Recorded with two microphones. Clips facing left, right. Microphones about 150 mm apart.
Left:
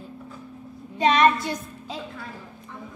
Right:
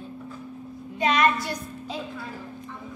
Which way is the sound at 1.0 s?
30° left (ahead or behind).